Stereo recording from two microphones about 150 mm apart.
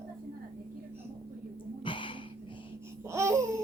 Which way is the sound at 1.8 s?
35° left (ahead or behind).